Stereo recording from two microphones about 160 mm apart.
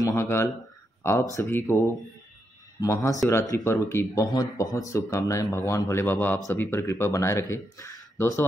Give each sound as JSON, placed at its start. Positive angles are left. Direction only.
{"t": 0.0, "sound": "speech", "side_deg": 20}